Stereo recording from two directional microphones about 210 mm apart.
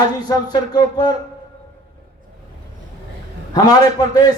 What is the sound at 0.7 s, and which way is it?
Speech, 20° left (ahead or behind).